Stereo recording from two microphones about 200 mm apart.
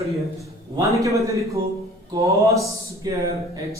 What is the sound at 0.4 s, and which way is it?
A man's voice, 15° right (ahead or behind).